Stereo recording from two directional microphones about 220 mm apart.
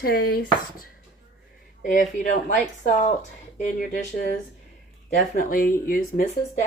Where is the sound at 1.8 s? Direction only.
35° left (ahead or behind).